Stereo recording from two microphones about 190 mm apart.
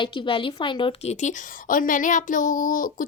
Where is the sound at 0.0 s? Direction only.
25° left (ahead or behind).